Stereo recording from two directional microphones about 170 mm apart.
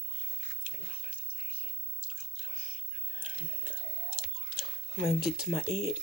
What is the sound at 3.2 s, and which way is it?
Chewing, 10° right (ahead or behind).